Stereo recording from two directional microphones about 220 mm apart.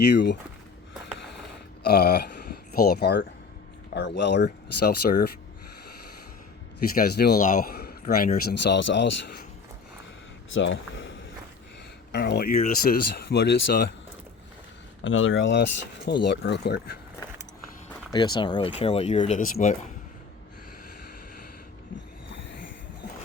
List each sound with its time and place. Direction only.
0.0 s speech: 50° left (ahead or behind)
1.8 s speech: 45° left (ahead or behind)
6.9 s speech: 45° left (ahead or behind)
10.5 s speech: 55° left (ahead or behind)
15.0 s speech: 60° left (ahead or behind); by 17.0 s 45° left (ahead or behind)
18.1 s speech: 20° left (ahead or behind)